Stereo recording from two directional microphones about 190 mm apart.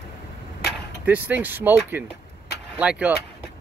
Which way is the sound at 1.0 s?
10° right (ahead or behind).